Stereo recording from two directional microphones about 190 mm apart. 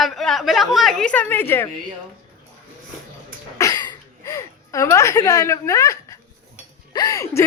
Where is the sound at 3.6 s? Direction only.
20° left (ahead or behind).